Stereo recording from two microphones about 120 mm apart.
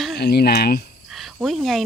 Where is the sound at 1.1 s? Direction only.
Centre (ahead or behind).